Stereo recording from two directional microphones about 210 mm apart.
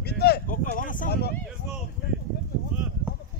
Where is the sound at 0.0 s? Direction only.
50° left (ahead or behind).